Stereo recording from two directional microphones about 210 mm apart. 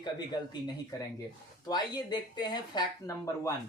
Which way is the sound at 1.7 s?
20° left (ahead or behind).